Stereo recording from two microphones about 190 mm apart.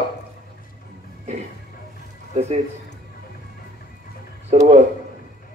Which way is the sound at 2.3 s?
35° right (ahead or behind).